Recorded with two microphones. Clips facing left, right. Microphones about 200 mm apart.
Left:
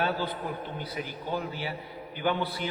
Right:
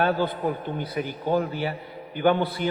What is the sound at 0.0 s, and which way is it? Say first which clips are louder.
A man's voice: right 7 dB; 55° right (ahead or behind).